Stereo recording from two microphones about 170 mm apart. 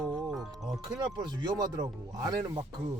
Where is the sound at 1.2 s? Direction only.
25° right (ahead or behind).